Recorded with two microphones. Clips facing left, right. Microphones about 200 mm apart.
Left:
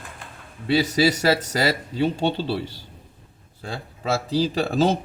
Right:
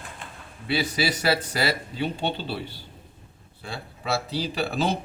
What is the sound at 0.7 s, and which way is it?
Speech, 40° left (ahead or behind).